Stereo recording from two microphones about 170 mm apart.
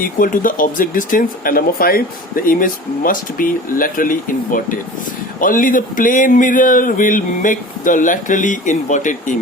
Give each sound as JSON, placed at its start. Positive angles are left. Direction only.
{"t": 0.0, "sound": "speech", "side_deg": 55}